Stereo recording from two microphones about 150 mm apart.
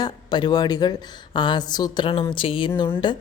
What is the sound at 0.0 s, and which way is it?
A woman's voice, 30° left (ahead or behind).